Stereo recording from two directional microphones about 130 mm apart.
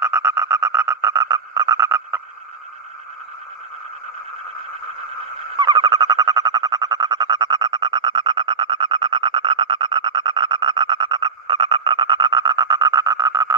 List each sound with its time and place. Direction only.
0.0 s frog: 20° right (ahead or behind)
5.6 s music: 30° right (ahead or behind)